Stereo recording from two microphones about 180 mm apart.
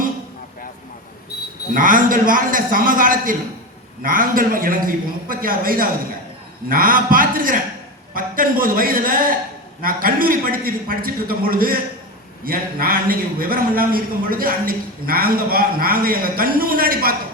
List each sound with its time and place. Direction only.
1.7 s a man's voice: 50° right (ahead or behind)